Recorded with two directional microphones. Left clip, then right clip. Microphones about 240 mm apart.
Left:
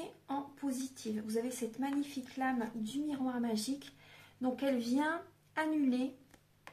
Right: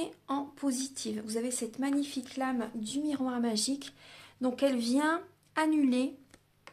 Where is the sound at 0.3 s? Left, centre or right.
Right.